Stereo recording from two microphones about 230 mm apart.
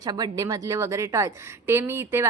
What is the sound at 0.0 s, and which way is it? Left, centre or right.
A woman's voice, centre.